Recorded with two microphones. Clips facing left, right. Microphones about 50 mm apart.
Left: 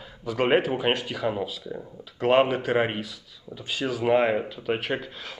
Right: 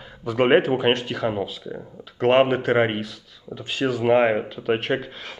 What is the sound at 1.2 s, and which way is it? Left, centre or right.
Speech, centre.